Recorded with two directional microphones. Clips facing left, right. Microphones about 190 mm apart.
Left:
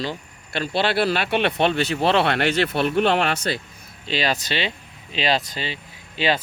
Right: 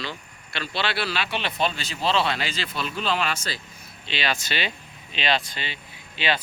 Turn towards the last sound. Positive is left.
turn(degrees=40)  # may be behind; listen again after turning